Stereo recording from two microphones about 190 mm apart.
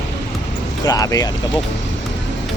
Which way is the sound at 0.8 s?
20° left (ahead or behind).